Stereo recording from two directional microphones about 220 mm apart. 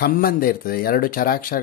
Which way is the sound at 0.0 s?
40° left (ahead or behind).